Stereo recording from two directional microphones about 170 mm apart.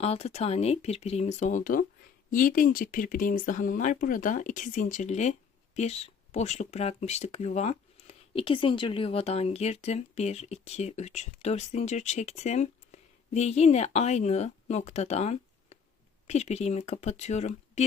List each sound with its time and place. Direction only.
0.0 s speech: 35° left (ahead or behind)